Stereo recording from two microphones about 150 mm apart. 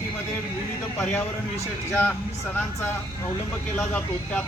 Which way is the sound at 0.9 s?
15° left (ahead or behind).